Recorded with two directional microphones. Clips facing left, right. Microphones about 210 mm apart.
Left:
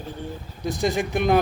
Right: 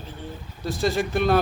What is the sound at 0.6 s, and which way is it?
Speech, 15° left (ahead or behind).